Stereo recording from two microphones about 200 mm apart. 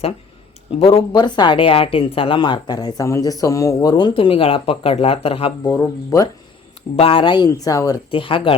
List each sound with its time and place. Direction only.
0.8 s speech: 30° left (ahead or behind)
5.7 s speech: 10° left (ahead or behind)
6.9 s speech: 30° left (ahead or behind)